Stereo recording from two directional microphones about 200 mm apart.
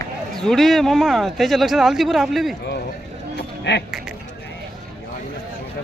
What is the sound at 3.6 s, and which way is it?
Speech, 60° left (ahead or behind).